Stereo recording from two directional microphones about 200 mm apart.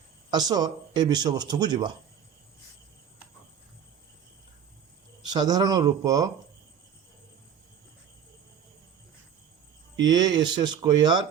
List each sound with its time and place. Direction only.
0.3 s speech: 20° right (ahead or behind)
5.3 s speech: 20° right (ahead or behind)
10.0 s speech: 20° right (ahead or behind)